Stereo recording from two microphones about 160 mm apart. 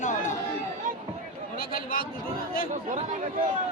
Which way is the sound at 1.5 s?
65° left (ahead or behind).